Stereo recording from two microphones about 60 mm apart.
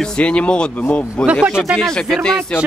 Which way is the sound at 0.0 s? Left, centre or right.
Centre.